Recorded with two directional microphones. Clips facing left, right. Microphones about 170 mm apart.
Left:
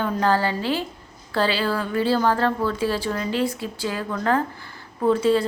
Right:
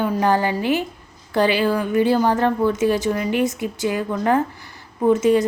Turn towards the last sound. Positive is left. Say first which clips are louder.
# right 3 dB
turn(degrees=-20)  # may be behind; listen again after turning